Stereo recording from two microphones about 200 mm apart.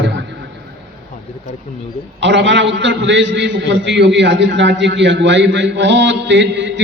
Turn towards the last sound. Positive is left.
turn(degrees=-60)  # may be behind; listen again after turning